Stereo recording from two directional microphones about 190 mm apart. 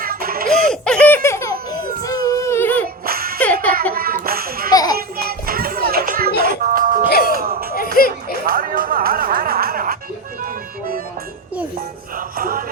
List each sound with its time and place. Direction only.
0.0 s baby laughter: 50° right (ahead or behind)
0.7 s baby laughter: 5° left (ahead or behind)
2.8 s music: 50° right (ahead or behind)
3.4 s music: 5° left (ahead or behind)
3.9 s a sound: 50° right (ahead or behind)
4.7 s a sound: 20° left (ahead or behind)
4.9 s music: 50° right (ahead or behind)
7.3 s a sound: 50° right (ahead or behind)
7.9 s music: 50° left (ahead or behind)
8.4 s music: 45° right (ahead or behind)
10.4 s accordion: 50° right (ahead or behind)
12.1 s music: 50° right (ahead or behind)